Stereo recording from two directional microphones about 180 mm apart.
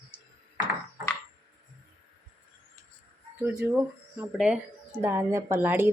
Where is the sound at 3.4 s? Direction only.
15° right (ahead or behind).